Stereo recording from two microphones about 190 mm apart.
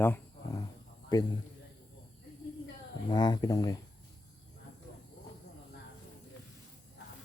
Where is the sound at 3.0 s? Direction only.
20° left (ahead or behind).